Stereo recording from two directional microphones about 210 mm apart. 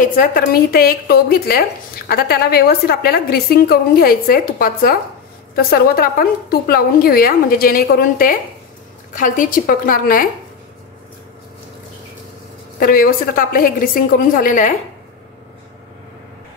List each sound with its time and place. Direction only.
0.0 s a woman's voice: 40° left (ahead or behind)
12.7 s a woman's voice: 45° left (ahead or behind)